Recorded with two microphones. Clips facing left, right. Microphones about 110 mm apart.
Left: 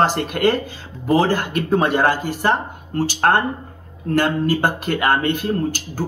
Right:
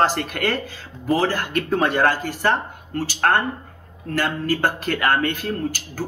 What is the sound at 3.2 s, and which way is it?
Speech, 30° left (ahead or behind).